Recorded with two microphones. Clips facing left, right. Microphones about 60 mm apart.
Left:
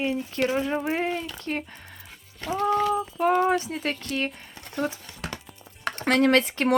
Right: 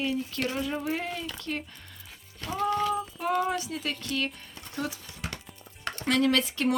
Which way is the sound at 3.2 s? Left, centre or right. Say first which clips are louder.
Left 8 dB; left.